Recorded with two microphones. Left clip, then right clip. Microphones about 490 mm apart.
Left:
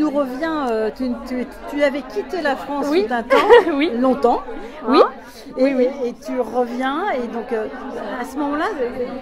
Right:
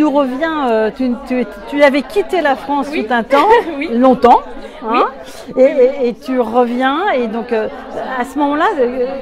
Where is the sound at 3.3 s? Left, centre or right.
Left.